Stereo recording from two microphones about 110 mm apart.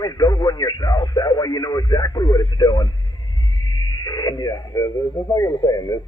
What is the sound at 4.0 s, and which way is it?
Speech, 35° left (ahead or behind).